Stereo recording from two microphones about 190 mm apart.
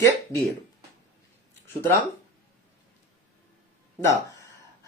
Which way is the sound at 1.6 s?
10° left (ahead or behind).